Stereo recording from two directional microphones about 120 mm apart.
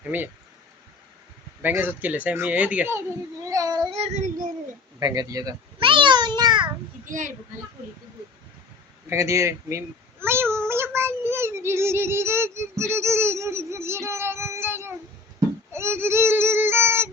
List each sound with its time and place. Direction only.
0.1 s speech: 15° right (ahead or behind)
1.6 s speech: 15° right (ahead or behind)
3.4 s cat: 30° right (ahead or behind)
3.9 s child singing: 65° right (ahead or behind)
4.9 s speech: 30° right (ahead or behind)
5.9 s a sound: 40° right (ahead or behind)
7.0 s a child's voice: 90° right
9.0 s speech: 25° right (ahead or behind)
10.7 s child singing: 20° right (ahead or behind)